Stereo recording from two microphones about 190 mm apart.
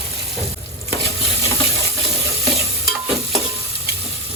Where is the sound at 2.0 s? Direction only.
Centre (ahead or behind).